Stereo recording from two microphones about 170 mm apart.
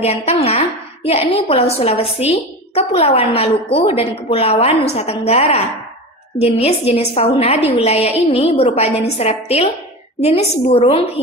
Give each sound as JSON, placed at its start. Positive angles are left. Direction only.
{"t": 0.0, "sound": "a woman's voice", "side_deg": 40}